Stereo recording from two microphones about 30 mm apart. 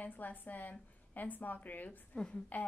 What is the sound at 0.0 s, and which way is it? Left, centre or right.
Speech, left.